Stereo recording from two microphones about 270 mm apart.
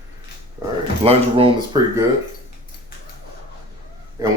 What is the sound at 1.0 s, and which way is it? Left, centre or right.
Speech, right.